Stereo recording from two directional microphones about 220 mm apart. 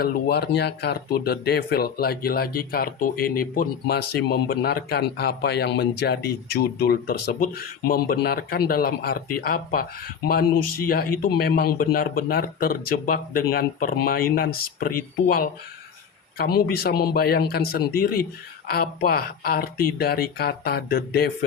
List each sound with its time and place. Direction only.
0.0 s speech: 45° left (ahead or behind)